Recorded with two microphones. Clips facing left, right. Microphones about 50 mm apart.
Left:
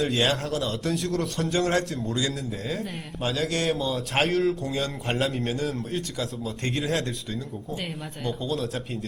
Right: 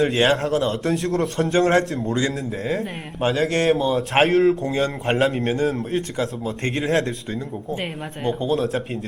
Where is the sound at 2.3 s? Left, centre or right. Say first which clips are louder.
Right 6 dB; centre.